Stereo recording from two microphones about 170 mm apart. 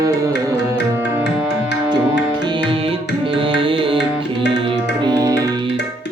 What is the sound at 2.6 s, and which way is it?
Music, 30° right (ahead or behind).